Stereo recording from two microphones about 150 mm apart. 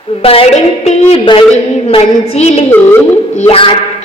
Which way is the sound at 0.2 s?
40° left (ahead or behind).